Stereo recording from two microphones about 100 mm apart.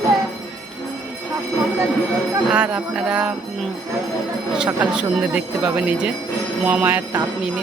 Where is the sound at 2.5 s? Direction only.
10° right (ahead or behind).